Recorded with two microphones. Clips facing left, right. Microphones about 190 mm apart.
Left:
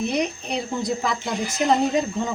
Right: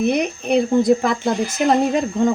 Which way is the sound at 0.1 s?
55° right (ahead or behind).